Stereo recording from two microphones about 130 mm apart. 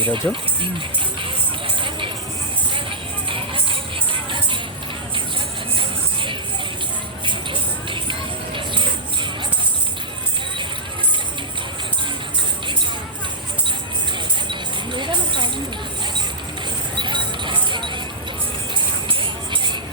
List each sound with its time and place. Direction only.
0.0 s speech: 40° right (ahead or behind)
0.6 s music: 40° right (ahead or behind)
3.2 s music: 40° right (ahead or behind)
5.7 s music: 40° right (ahead or behind)
14.5 s a sound: 35° right (ahead or behind)
17.0 s a sound: 35° right (ahead or behind)
18.7 s music: 40° right (ahead or behind)